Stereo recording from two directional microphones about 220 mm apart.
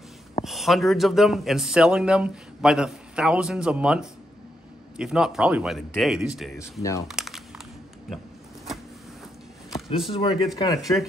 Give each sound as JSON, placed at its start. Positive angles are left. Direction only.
{"t": 0.5, "sound": "speech", "side_deg": 0}
{"t": 6.8, "sound": "speech", "side_deg": 15}
{"t": 7.1, "sound": "crumpling", "side_deg": 0}
{"t": 9.8, "sound": "speech", "side_deg": 25}
{"t": 10.8, "sound": "speech", "side_deg": 0}